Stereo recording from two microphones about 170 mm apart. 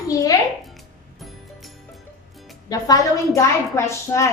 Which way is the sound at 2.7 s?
20° left (ahead or behind).